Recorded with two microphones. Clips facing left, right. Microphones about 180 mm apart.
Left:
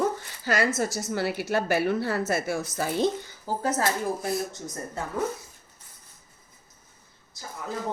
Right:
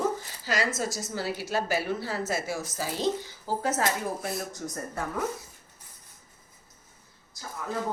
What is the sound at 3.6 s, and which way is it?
Speech, 40° left (ahead or behind).